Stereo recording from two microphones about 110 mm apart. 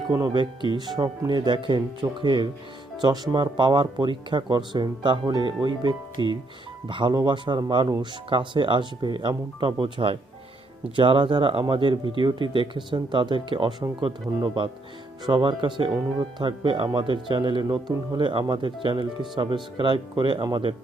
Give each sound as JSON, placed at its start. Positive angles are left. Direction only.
{"t": 0.3, "sound": "speech", "side_deg": -45}